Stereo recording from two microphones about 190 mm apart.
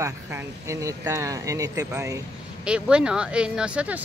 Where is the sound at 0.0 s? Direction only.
15° right (ahead or behind).